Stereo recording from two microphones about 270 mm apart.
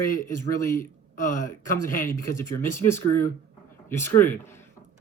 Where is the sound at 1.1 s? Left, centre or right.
Left.